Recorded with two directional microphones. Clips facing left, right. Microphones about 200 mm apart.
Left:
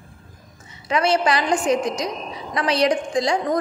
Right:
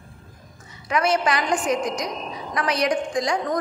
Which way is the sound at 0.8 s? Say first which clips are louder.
Left 2 dB; 30° left (ahead or behind).